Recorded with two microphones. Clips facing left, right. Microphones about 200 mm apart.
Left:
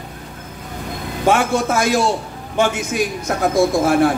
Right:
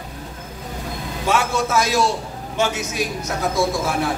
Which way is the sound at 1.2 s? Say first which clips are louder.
Left 4 dB; 55° left (ahead or behind).